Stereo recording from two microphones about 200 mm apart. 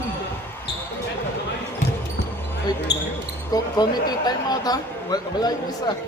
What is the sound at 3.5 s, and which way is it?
Speech, 20° left (ahead or behind).